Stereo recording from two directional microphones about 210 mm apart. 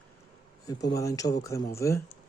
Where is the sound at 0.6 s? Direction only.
15° left (ahead or behind).